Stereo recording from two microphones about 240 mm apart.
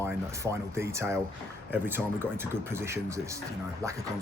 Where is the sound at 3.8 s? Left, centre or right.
Centre.